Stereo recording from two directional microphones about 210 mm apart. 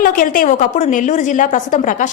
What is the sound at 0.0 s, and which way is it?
A woman's voice, 40° left (ahead or behind).